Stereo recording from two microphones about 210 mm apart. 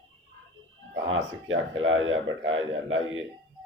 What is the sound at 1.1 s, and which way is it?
Speech, 70° right (ahead or behind).